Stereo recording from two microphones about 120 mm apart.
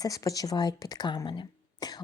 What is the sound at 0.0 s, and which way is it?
A woman's voice, 30° left (ahead or behind).